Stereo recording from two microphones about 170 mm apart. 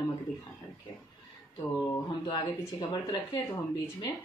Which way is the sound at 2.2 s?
25° left (ahead or behind).